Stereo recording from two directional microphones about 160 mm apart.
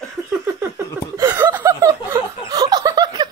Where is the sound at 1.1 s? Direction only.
15° right (ahead or behind).